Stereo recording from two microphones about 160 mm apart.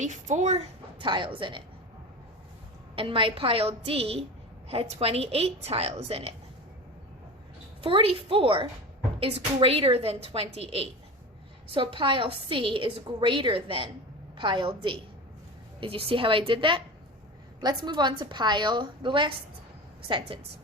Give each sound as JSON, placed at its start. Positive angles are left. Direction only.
{"t": 0.0, "sound": "a woman's voice", "side_deg": -50}
{"t": 2.9, "sound": "a woman's voice", "side_deg": -35}
{"t": 7.8, "sound": "a woman's voice", "side_deg": -35}